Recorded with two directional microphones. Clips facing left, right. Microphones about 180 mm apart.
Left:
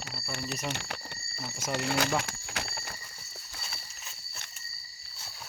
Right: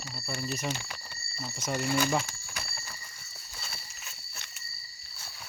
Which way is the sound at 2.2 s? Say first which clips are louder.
Even; 70° left (ahead or behind).